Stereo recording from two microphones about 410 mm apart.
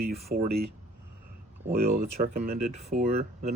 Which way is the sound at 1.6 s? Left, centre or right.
Right.